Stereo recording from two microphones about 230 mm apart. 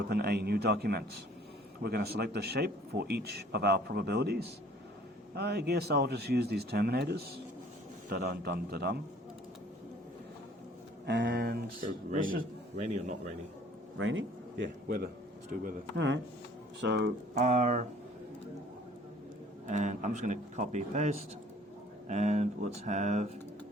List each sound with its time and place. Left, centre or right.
0.1 s a man's voice: right
11.0 s a man's voice: right
14.0 s speech: right
14.8 s a man's voice: right
17.4 s speech: right
19.6 s speech: right